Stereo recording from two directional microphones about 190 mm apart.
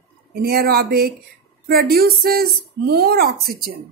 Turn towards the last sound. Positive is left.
turn(degrees=-55)  # may be behind; listen again after turning